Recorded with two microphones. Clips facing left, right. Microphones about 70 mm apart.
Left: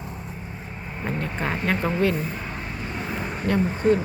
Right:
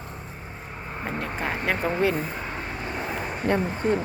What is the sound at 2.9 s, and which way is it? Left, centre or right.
Vehicle, centre.